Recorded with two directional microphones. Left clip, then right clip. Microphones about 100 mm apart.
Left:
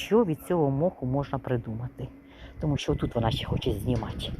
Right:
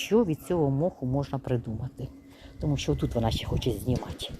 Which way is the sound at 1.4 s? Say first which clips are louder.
Left 1 dB; 45° right (ahead or behind).